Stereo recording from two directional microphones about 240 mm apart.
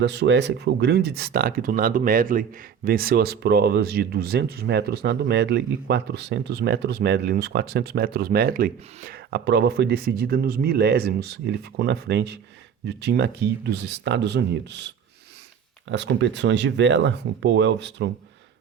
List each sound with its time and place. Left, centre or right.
0.0 s speech: right